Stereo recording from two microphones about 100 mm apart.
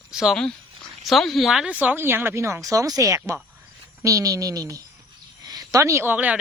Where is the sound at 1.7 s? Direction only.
15° right (ahead or behind).